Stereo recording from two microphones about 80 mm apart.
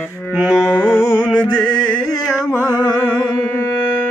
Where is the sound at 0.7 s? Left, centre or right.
Centre.